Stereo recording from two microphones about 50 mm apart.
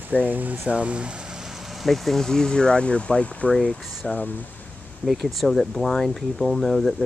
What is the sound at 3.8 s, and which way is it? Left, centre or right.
Speech, centre.